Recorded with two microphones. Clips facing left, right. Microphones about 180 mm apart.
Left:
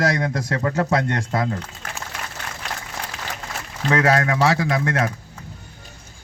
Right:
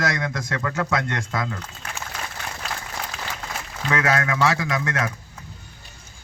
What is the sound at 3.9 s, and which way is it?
A man's voice, 35° left (ahead or behind).